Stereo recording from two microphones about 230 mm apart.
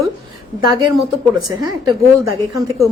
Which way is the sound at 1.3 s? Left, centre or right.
Centre.